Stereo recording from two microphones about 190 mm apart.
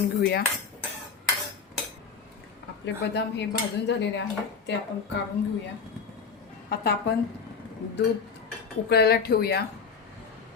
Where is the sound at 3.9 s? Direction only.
65° left (ahead or behind).